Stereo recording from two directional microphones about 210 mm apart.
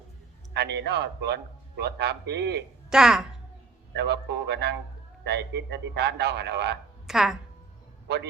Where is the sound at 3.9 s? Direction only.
55° right (ahead or behind).